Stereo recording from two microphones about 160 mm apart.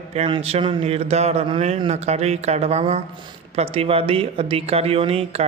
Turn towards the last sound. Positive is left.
turn(degrees=-35)  # may be behind; listen again after turning